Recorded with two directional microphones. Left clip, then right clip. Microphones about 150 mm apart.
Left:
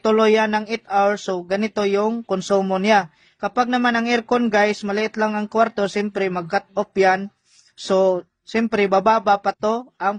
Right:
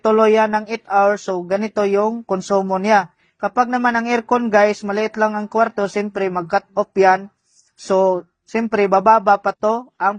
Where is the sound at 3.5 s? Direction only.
25° left (ahead or behind).